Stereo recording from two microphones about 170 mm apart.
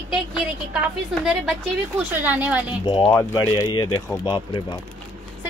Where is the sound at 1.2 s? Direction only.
5° right (ahead or behind).